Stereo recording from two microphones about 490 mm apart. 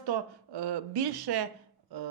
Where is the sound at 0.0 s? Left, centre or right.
Right.